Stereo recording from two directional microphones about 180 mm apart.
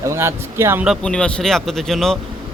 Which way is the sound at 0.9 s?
5° left (ahead or behind).